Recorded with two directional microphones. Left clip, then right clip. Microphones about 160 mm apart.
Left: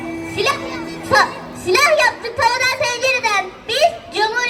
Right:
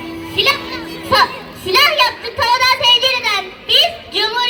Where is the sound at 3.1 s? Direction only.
20° right (ahead or behind).